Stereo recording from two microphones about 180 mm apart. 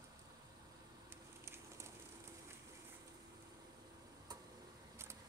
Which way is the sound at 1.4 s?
15° right (ahead or behind).